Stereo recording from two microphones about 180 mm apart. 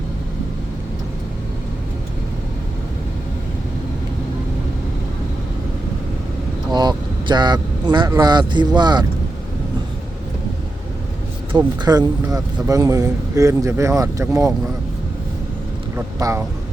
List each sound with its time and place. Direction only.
6.7 s vehicle: 25° right (ahead or behind)
7.9 s speech: 20° right (ahead or behind)
11.5 s speech: 20° right (ahead or behind)
16.0 s speech: 15° right (ahead or behind)